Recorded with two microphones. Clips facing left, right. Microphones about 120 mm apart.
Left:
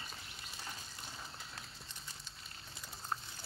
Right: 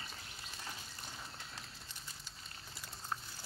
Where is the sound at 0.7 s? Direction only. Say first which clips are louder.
Even; centre (ahead or behind).